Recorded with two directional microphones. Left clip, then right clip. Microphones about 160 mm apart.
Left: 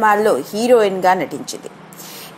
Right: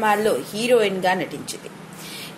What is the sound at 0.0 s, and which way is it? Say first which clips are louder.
A woman's voice: left 6 dB; 30° left (ahead or behind).